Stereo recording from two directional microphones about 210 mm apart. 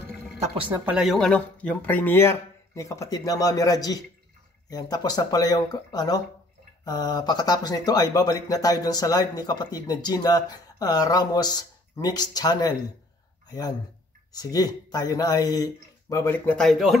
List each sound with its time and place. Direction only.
0.8 s speech: centre (ahead or behind)